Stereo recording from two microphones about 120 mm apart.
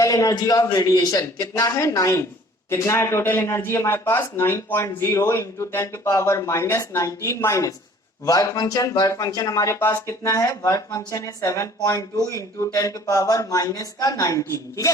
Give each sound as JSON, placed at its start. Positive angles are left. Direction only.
{"t": 0.0, "sound": "speech", "side_deg": 30}